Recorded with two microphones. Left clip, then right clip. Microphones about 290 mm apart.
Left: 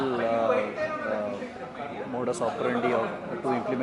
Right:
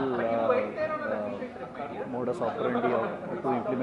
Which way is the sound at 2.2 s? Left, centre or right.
Centre.